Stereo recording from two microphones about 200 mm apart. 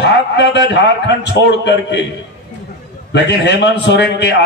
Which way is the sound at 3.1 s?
60° left (ahead or behind).